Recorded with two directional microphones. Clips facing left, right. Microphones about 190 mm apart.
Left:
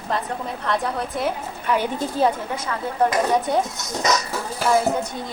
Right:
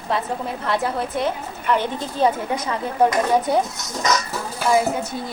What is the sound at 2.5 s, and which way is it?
Speech, 15° right (ahead or behind).